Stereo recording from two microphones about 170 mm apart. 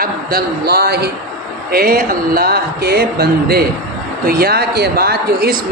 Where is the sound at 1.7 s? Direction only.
60° right (ahead or behind).